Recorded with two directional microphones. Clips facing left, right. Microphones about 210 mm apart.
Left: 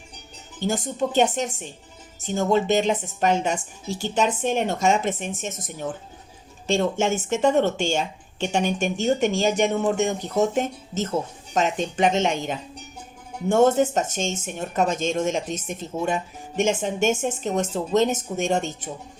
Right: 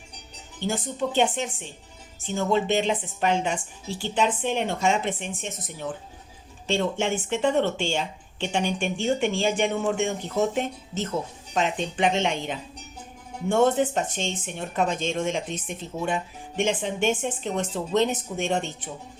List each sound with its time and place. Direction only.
0.7 s speech: 45° left (ahead or behind)